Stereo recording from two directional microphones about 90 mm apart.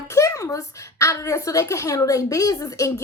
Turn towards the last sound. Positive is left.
turn(degrees=35)  # may be behind; listen again after turning